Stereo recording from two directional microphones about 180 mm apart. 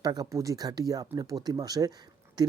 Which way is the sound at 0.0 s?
20° right (ahead or behind).